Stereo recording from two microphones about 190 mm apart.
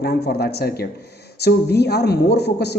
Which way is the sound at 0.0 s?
55° left (ahead or behind).